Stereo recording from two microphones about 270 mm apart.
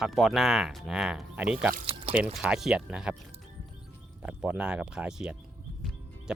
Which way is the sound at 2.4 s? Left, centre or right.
Centre.